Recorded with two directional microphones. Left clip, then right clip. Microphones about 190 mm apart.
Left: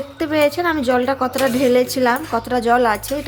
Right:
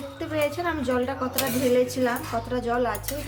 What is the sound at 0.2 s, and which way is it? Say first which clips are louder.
A woman's voice: left 10 dB; 50° left (ahead or behind).